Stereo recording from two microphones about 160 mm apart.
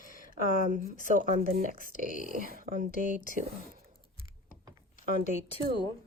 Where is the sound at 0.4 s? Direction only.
60° right (ahead or behind).